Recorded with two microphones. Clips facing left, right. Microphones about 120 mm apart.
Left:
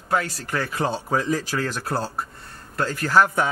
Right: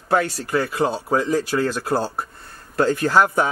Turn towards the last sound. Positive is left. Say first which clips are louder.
# right 2 dB
turn(degrees=-20)  # may be behind; listen again after turning